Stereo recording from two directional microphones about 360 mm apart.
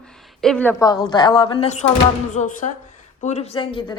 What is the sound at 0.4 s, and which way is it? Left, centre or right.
Speech, centre.